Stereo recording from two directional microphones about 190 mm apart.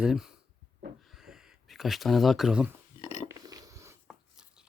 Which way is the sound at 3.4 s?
20° right (ahead or behind).